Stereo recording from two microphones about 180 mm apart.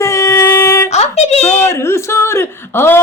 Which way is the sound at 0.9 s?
35° left (ahead or behind).